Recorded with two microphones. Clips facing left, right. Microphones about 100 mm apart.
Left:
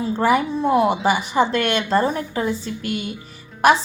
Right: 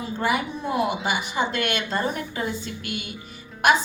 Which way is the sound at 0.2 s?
35° left (ahead or behind).